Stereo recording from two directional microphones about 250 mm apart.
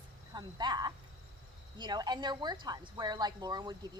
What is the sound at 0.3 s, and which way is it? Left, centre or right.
A woman's voice, centre.